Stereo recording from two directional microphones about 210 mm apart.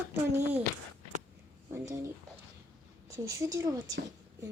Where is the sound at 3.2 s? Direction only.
15° right (ahead or behind).